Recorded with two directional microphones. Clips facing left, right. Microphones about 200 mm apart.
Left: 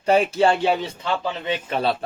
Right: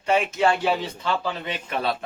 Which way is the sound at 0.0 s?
35° left (ahead or behind).